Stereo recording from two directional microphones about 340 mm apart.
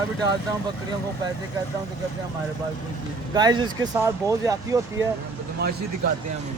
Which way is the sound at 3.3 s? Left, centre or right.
Centre.